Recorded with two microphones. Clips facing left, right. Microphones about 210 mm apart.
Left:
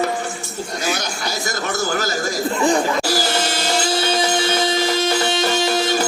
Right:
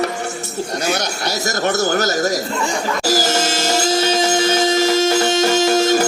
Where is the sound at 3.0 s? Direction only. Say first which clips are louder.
Right 2 dB; 45° right (ahead or behind).